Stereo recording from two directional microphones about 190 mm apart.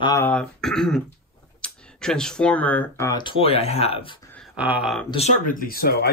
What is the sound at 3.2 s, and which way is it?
Speech, 30° left (ahead or behind).